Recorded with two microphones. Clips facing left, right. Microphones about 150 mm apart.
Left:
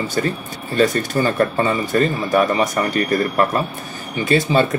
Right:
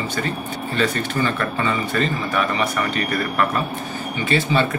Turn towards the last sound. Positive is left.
turn(degrees=40)  # may be behind; listen again after turning